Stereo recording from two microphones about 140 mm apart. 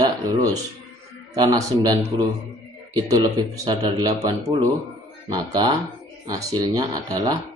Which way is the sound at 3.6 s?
25° right (ahead or behind).